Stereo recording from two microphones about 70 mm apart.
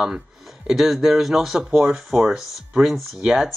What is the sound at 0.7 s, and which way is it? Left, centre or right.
Speech, centre.